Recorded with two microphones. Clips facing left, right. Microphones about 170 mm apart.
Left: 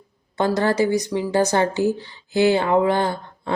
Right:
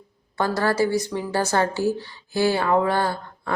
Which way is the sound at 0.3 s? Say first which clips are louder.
Left 2 dB; 20° left (ahead or behind).